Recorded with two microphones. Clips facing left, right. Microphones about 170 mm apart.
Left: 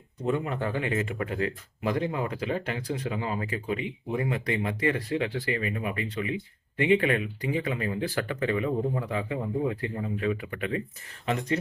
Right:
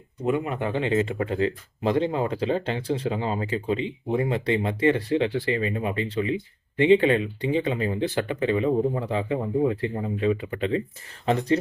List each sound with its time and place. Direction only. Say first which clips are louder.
0.3 s speech: right 3 dB; 15° right (ahead or behind); by 11.5 s 30° right (ahead or behind)